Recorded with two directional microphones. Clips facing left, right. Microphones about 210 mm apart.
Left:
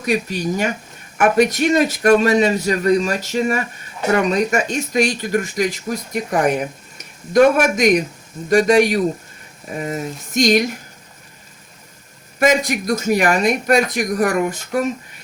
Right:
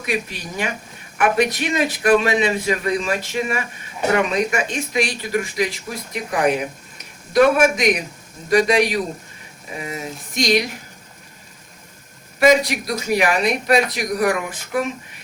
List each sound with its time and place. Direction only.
0.0 s a man's voice: 40° left (ahead or behind)
12.4 s speech: 50° left (ahead or behind)